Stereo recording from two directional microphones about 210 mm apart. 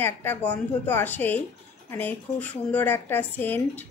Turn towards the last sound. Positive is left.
turn(degrees=10)  # may be behind; listen again after turning